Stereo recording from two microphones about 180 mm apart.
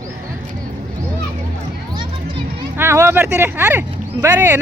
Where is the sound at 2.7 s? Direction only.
15° right (ahead or behind).